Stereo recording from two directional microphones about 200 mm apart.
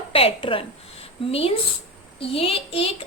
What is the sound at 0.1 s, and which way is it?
A woman's voice, 30° left (ahead or behind).